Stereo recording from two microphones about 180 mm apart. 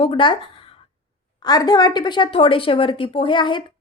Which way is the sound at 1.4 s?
20° left (ahead or behind).